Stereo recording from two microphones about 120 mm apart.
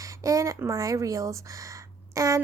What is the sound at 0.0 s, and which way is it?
A woman's voice, 25° right (ahead or behind).